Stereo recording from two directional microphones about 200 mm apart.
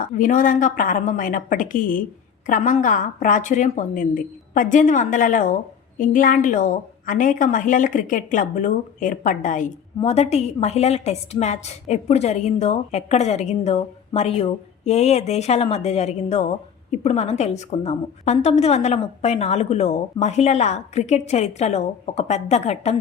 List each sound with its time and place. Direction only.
0.0 s a woman's voice: 40° left (ahead or behind)